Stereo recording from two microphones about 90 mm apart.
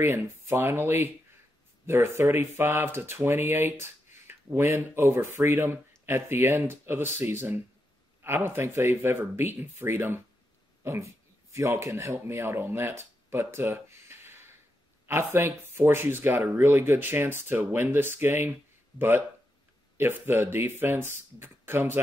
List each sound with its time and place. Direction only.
0.0 s speech: 30° right (ahead or behind)